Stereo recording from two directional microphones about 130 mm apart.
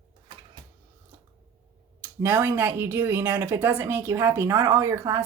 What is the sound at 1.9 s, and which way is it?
Speech, 20° right (ahead or behind).